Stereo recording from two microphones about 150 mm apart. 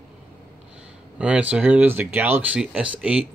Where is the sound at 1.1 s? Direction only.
10° right (ahead or behind).